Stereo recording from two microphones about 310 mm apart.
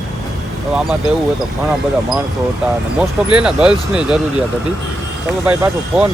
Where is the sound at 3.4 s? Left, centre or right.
Centre.